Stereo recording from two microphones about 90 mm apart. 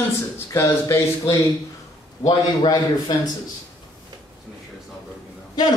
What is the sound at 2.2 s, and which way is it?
Speech, 50° left (ahead or behind).